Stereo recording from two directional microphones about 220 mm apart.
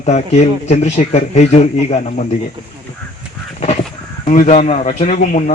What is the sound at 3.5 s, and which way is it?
Crow, 30° left (ahead or behind).